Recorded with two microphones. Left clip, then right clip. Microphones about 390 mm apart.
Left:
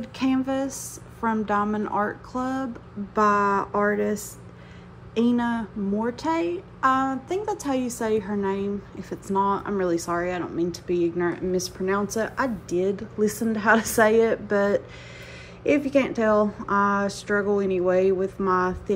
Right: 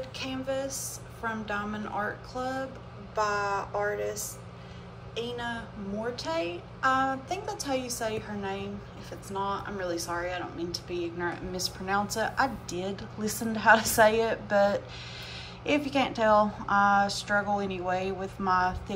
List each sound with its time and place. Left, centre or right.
0.0 s speech: centre
5.1 s speech: centre